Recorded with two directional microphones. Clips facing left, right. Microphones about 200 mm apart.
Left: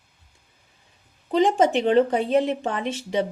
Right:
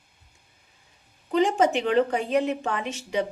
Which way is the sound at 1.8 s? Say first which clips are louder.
Left 4 dB; 30° left (ahead or behind).